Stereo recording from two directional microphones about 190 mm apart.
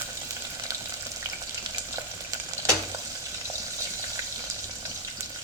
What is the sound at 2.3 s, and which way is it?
Frying, 20° right (ahead or behind).